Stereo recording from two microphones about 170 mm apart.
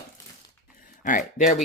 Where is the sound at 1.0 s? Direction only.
50° left (ahead or behind).